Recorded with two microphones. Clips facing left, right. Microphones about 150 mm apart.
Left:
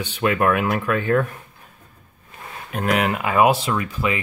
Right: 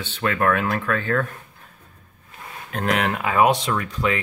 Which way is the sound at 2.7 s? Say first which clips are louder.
Left 2 dB; 5° left (ahead or behind).